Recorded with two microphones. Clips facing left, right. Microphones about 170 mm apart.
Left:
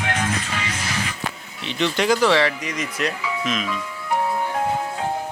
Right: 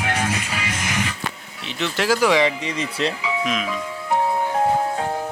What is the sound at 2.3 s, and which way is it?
Speech, 20° right (ahead or behind).